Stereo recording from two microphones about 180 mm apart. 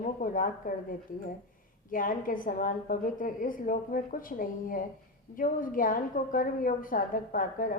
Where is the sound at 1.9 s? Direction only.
50° left (ahead or behind).